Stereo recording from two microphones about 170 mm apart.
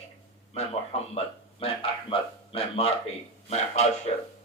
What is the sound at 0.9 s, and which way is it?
A man's voice, 40° left (ahead or behind).